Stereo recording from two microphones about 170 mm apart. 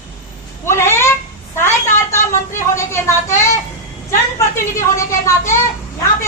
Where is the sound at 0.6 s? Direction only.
15° left (ahead or behind).